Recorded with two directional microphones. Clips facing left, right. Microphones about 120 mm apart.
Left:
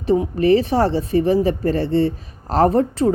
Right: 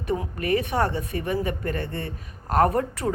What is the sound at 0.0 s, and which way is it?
Speech, 25° left (ahead or behind).